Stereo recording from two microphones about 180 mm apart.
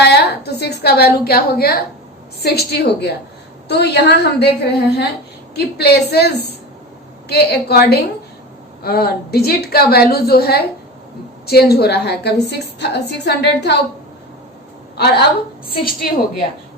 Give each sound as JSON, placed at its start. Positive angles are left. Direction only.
{"t": 0.0, "sound": "a woman's voice", "side_deg": 65}
{"t": 14.9, "sound": "a woman's voice", "side_deg": 65}